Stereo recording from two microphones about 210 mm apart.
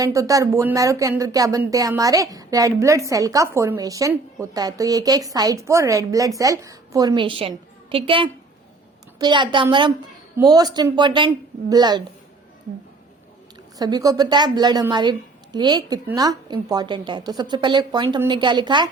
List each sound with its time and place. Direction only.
0.0 s a woman's voice: 15° right (ahead or behind)
13.7 s a woman's voice: 20° right (ahead or behind)